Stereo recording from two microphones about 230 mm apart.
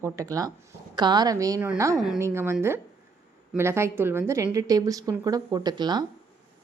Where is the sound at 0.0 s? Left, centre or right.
Centre.